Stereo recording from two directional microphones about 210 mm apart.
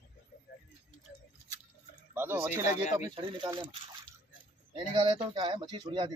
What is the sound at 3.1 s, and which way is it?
Speech, 25° right (ahead or behind).